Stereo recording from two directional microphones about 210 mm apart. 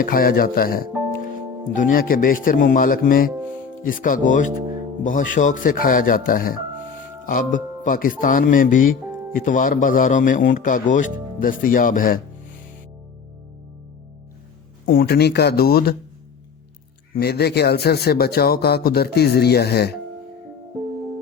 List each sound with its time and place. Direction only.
0.0 s a man's voice: 45° left (ahead or behind)
14.8 s speech: 45° left (ahead or behind)
17.2 s speech: 50° left (ahead or behind)